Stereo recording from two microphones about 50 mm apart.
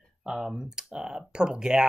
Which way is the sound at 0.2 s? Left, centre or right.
Centre.